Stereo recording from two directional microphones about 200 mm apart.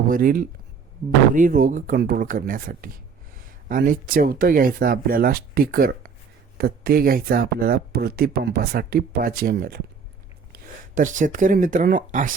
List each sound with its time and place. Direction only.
0.1 s speech: 45° right (ahead or behind)